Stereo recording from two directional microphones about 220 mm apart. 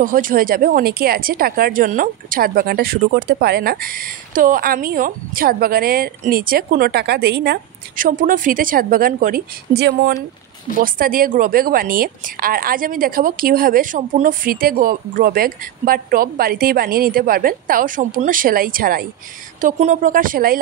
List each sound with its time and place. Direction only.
0.0 s speech: 40° right (ahead or behind)